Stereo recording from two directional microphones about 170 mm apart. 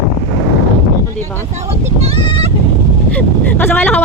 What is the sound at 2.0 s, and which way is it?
Speech, 35° right (ahead or behind).